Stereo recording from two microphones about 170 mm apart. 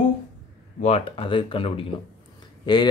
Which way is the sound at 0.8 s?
35° left (ahead or behind).